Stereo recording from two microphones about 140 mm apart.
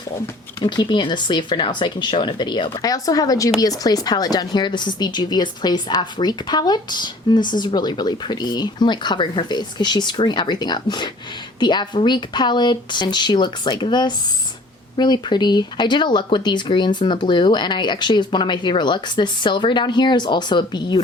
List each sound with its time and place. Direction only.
0.6 s a woman's voice: 35° left (ahead or behind)